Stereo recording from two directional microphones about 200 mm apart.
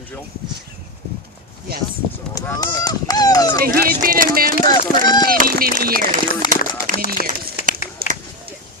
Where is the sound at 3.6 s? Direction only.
45° right (ahead or behind).